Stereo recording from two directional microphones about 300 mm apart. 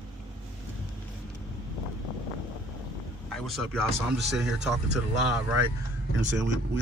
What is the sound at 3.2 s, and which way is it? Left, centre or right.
Vehicle, centre.